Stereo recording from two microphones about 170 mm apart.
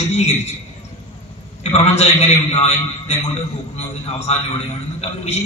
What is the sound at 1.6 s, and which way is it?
A man's voice, 40° left (ahead or behind).